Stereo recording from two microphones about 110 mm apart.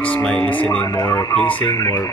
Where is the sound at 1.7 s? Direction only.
35° left (ahead or behind).